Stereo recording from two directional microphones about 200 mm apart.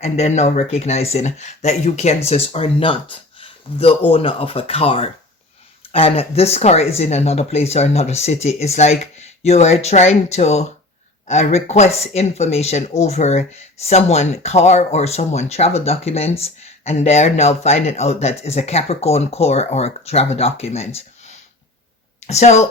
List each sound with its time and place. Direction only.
0.0 s speech: 35° left (ahead or behind)
22.3 s speech: 35° left (ahead or behind)